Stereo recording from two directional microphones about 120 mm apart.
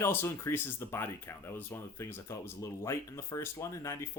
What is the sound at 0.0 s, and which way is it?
Speech, 20° left (ahead or behind).